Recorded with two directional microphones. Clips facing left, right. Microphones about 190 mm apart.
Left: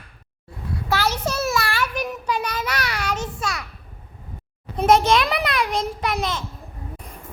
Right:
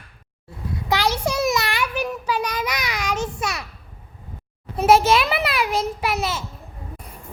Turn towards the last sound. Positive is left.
turn(degrees=-5)  # may be behind; listen again after turning